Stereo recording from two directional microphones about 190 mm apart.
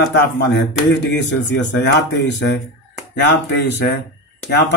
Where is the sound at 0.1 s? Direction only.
65° left (ahead or behind).